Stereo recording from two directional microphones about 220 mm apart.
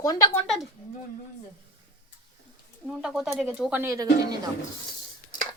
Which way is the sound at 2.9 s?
Centre (ahead or behind).